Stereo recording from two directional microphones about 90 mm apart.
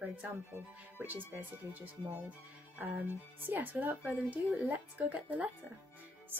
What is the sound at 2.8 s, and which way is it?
Speech, 20° right (ahead or behind).